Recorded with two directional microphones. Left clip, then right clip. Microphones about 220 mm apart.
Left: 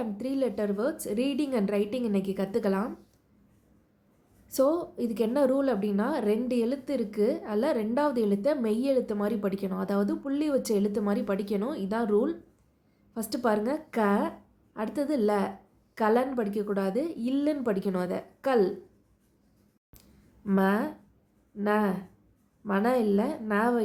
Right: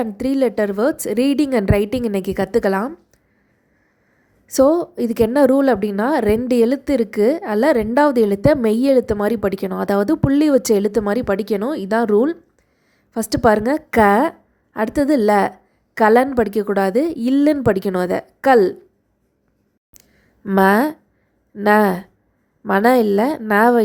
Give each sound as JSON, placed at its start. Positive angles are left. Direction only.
{"t": 0.0, "sound": "a woman's voice", "side_deg": -40}
{"t": 4.4, "sound": "a woman's voice", "side_deg": -35}
{"t": 19.9, "sound": "a sound", "side_deg": -30}
{"t": 20.7, "sound": "a woman's voice", "side_deg": -45}